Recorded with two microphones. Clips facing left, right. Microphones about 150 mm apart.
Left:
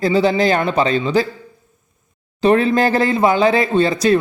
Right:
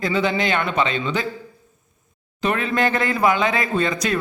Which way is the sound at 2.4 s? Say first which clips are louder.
Left 7 dB; 30° left (ahead or behind).